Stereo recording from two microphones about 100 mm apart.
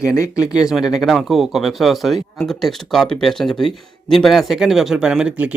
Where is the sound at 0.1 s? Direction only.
30° left (ahead or behind).